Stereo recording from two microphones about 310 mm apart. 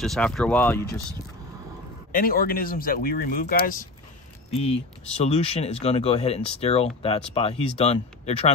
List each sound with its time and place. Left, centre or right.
0.0 s speech: centre
2.1 s speech: left